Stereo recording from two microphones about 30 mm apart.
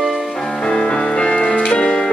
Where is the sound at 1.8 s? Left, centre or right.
Left.